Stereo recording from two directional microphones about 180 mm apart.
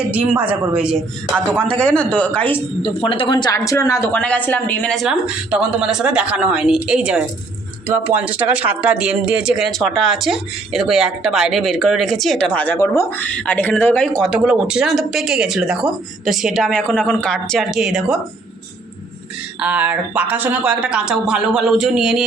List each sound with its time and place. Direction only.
0.1 s a woman's voice: 10° right (ahead or behind)
1.7 s speech: 5° left (ahead or behind)
2.8 s speech: 30° left (ahead or behind); by 18.2 s 5° right (ahead or behind)
19.5 s speech: 10° right (ahead or behind)